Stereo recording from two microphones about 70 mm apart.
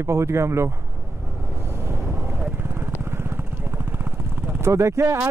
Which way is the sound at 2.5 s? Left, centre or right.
Right.